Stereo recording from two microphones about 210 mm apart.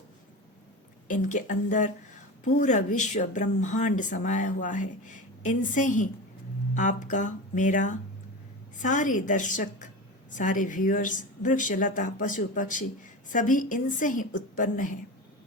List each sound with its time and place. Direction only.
1.0 s a woman's voice: 40° left (ahead or behind)